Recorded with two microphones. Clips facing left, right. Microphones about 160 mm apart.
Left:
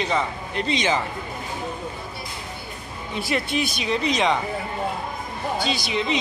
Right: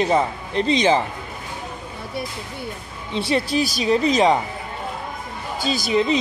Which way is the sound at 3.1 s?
30° right (ahead or behind).